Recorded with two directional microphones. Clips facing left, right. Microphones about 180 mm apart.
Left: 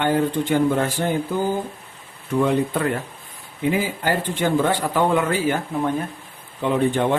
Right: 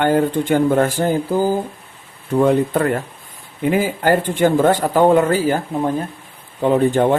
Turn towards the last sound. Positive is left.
turn(degrees=-45)  # may be behind; listen again after turning